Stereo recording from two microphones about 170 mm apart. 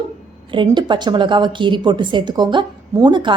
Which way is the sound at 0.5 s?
30° right (ahead or behind).